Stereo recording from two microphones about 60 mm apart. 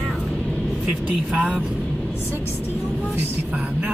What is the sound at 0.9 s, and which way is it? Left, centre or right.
Speech, right.